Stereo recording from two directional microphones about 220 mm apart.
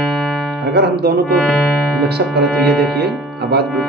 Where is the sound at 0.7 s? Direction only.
45° right (ahead or behind).